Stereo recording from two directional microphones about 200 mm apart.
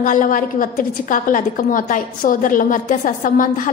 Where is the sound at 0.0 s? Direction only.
40° left (ahead or behind).